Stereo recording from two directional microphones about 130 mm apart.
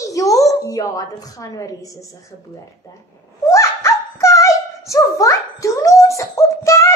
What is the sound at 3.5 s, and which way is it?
A child's voice, 25° left (ahead or behind).